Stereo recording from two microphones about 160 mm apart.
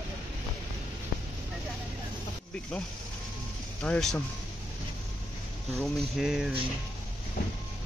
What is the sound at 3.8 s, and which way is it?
Speech, 5° left (ahead or behind).